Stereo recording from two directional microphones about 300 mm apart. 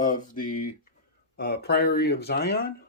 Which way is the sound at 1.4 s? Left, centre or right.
Left.